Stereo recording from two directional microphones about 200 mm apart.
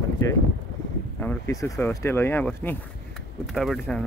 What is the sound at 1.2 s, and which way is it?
Speech, 10° left (ahead or behind).